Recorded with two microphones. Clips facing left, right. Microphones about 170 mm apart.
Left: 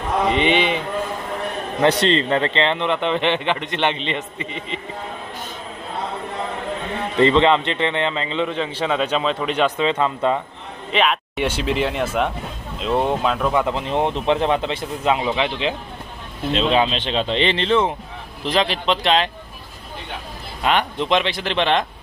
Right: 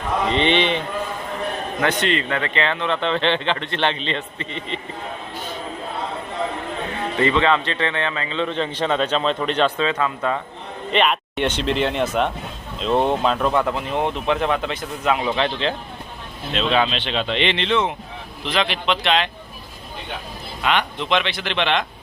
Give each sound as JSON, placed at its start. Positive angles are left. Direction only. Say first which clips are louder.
{"t": 0.3, "sound": "speech", "louder": "even", "side_deg": 10}
{"t": 1.8, "sound": "speech", "louder": "left 5 dB", "side_deg": 30}
{"t": 7.2, "sound": "speech", "louder": "left 4 dB", "side_deg": 25}
{"t": 8.4, "sound": "speech", "louder": "even", "side_deg": 5}
{"t": 10.9, "sound": "speech", "louder": "even", "side_deg": 0}
{"t": 13.7, "sound": "speech", "louder": "left 2 dB", "side_deg": 25}
{"t": 16.5, "sound": "speech", "louder": "left 2 dB", "side_deg": 30}
{"t": 20.6, "sound": "speech", "louder": "left 2 dB", "side_deg": 40}